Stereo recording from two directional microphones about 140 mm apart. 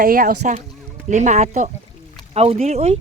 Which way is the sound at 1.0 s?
60° right (ahead or behind).